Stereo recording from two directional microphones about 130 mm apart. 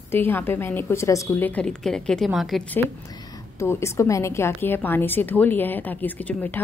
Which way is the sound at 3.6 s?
20° left (ahead or behind).